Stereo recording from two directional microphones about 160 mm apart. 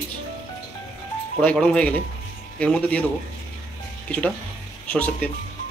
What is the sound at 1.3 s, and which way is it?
A man's voice, 5° left (ahead or behind).